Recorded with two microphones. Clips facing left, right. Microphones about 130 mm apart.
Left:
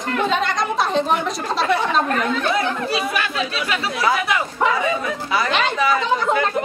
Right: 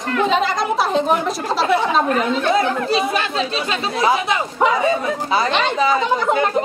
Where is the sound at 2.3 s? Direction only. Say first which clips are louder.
Right 3 dB; 25° right (ahead or behind).